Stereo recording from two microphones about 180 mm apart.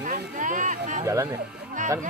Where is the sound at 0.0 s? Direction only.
45° right (ahead or behind).